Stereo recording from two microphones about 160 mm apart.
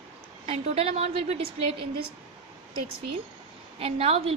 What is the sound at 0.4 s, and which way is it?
A woman's voice, 40° right (ahead or behind).